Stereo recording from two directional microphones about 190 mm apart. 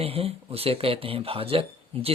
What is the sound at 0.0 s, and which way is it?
Speech, 30° right (ahead or behind).